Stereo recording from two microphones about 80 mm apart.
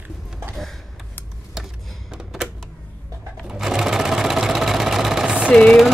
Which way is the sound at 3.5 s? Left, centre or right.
Centre.